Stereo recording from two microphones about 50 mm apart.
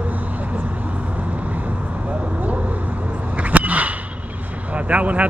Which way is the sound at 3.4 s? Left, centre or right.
Right.